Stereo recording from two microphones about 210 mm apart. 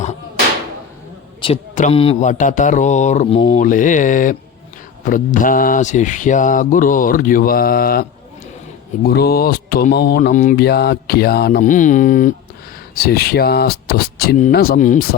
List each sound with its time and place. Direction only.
1.7 s mantra: 30° left (ahead or behind)
9.0 s speech: 50° left (ahead or behind)